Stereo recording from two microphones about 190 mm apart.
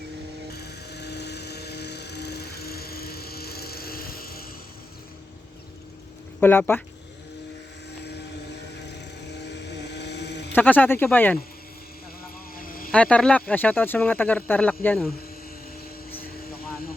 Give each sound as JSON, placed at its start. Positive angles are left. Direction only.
{"t": 0.5, "sound": "helicopter", "side_deg": 60}
{"t": 6.4, "sound": "speech", "side_deg": 10}
{"t": 9.4, "sound": "vehicle", "side_deg": 65}
{"t": 10.5, "sound": "speech", "side_deg": 10}
{"t": 12.5, "sound": "vehicle", "side_deg": 50}
{"t": 12.9, "sound": "speech", "side_deg": 5}